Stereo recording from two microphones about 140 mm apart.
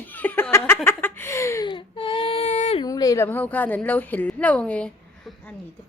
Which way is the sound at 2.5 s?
55° left (ahead or behind).